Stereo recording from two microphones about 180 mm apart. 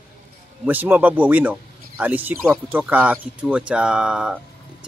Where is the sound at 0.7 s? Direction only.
10° right (ahead or behind).